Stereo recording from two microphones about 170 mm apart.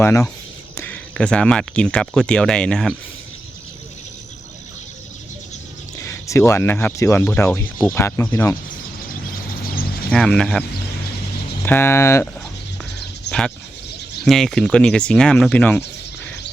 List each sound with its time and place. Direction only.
0.0 s speech: 15° left (ahead or behind)
6.0 s speech: 20° left (ahead or behind)
10.1 s speech: 5° left (ahead or behind)
11.6 s speech: 15° left (ahead or behind)
13.3 s a sound: 80° left
14.3 s speech: 5° left (ahead or behind)